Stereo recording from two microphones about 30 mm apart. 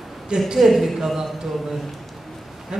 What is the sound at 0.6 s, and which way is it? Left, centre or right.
Speech, centre.